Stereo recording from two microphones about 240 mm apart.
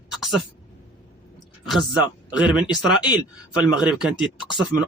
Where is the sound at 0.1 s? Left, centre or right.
Centre.